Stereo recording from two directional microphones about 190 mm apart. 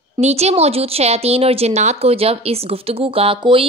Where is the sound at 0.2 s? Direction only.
35° right (ahead or behind).